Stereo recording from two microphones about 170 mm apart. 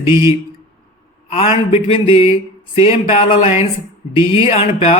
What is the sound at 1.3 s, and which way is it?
Speech, 35° left (ahead or behind).